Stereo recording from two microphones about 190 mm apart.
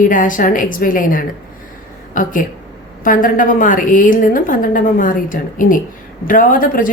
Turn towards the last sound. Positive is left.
turn(degrees=45)  # may be behind; listen again after turning